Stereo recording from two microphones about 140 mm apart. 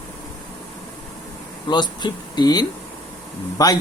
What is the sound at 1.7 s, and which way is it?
Speech, 30° left (ahead or behind).